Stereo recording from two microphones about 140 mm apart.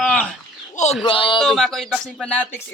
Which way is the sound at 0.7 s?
55° left (ahead or behind).